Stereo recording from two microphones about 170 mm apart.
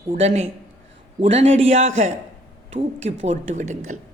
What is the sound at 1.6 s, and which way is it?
A woman's voice, 35° right (ahead or behind).